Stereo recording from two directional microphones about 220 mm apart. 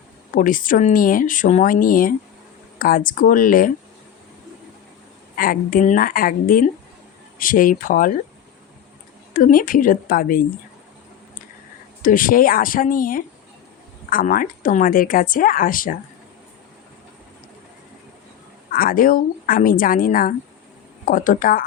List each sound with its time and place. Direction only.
0.3 s speech: 40° left (ahead or behind)
5.4 s speech: 40° left (ahead or behind)
9.3 s speech: 40° left (ahead or behind)
12.0 s speech: 40° left (ahead or behind)
18.7 s speech: 40° left (ahead or behind)